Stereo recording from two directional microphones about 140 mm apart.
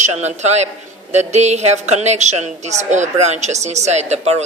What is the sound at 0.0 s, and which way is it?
A woman's voice, 55° right (ahead or behind).